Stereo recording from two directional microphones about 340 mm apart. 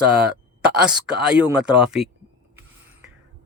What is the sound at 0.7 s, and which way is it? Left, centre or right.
Speech, centre.